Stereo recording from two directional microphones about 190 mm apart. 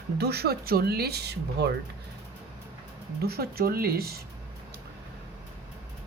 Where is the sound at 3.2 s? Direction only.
55° right (ahead or behind).